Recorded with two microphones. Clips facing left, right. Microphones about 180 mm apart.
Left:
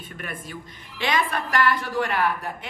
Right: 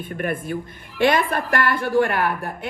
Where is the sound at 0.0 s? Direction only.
55° right (ahead or behind).